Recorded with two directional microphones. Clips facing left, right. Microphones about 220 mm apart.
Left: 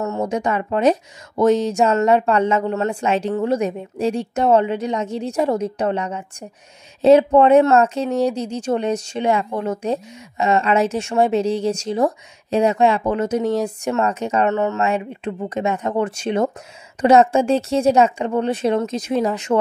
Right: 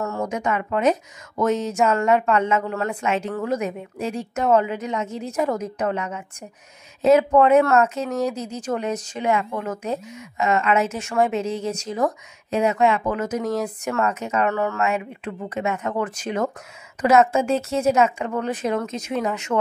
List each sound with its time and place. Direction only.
0.2 s speech: 35° left (ahead or behind)